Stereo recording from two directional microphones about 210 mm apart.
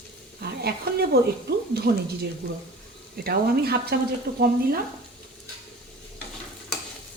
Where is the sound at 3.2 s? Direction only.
50° right (ahead or behind).